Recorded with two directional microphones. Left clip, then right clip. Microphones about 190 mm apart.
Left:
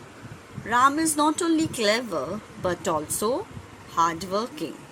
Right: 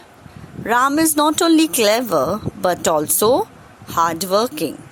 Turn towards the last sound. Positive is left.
turn(degrees=-55)  # may be behind; listen again after turning